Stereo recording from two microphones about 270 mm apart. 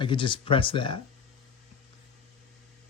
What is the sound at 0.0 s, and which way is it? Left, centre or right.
Speech, centre.